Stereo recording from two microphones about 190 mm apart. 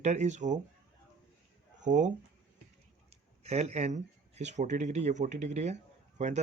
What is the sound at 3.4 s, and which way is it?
Speech, 35° right (ahead or behind).